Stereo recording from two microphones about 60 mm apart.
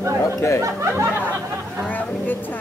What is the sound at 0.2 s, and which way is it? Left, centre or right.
Chatter, left.